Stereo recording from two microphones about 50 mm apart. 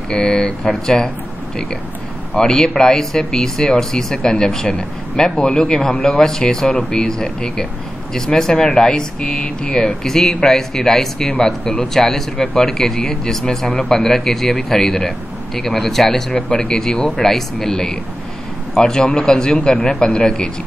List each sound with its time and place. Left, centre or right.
0.1 s speech: centre
2.3 s speech: centre